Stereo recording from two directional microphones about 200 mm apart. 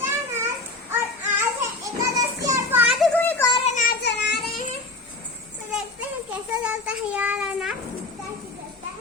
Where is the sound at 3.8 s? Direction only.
50° left (ahead or behind).